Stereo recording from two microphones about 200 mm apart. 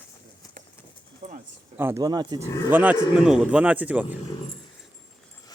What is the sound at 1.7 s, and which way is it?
Speech, 10° right (ahead or behind).